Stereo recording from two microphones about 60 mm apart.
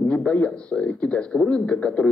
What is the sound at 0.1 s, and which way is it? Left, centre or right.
Speech, left.